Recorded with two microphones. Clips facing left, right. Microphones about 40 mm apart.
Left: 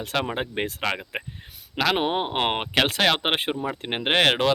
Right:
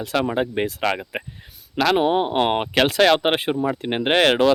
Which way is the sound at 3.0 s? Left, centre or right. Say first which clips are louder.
Right 5 dB; centre.